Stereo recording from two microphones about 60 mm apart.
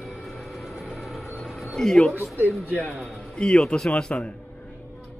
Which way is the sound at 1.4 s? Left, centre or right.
Centre.